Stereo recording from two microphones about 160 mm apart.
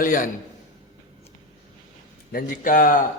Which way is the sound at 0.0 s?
55° left (ahead or behind).